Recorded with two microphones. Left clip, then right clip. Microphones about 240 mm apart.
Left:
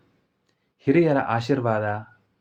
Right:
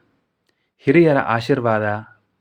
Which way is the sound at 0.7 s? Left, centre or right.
Right.